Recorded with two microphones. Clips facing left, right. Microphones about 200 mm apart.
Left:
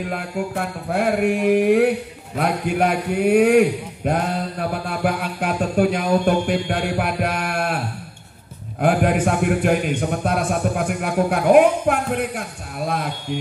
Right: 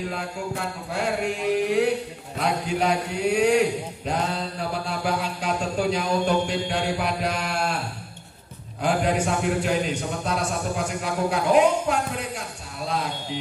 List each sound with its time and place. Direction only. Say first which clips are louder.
0.1 s mantra: left 5 dB; 55° left (ahead or behind)